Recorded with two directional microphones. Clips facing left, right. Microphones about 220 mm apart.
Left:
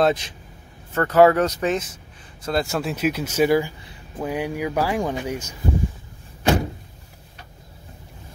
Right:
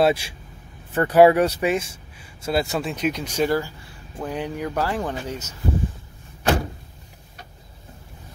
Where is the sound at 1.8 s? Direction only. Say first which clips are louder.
Even; 30° right (ahead or behind).